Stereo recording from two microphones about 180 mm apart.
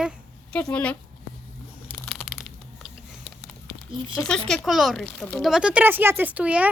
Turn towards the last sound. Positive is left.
turn(degrees=-10)  # may be behind; listen again after turning